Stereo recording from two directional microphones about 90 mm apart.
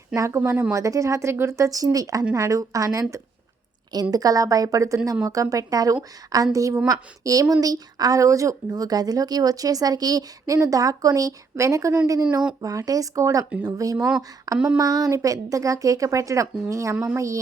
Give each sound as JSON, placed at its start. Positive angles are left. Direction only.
{"t": 0.2, "sound": "a woman's voice", "side_deg": -30}
{"t": 13.4, "sound": "speech", "side_deg": -15}
{"t": 13.7, "sound": "a woman's voice", "side_deg": -40}
{"t": 14.2, "sound": "a sound", "side_deg": -40}
{"t": 14.8, "sound": "a woman's voice", "side_deg": -40}